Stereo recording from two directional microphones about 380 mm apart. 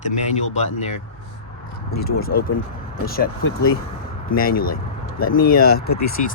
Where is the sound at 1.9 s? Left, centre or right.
Left.